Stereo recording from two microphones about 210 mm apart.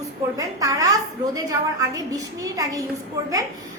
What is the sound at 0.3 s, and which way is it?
A woman's voice, 15° right (ahead or behind).